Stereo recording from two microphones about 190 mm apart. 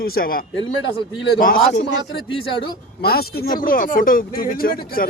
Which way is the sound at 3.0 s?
55° left (ahead or behind).